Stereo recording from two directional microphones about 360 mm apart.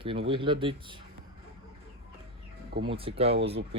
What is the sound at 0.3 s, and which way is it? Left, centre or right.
Speech, centre.